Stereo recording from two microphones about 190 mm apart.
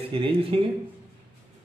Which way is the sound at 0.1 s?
30° right (ahead or behind).